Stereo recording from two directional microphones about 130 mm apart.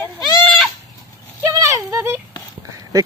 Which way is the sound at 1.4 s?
25° right (ahead or behind).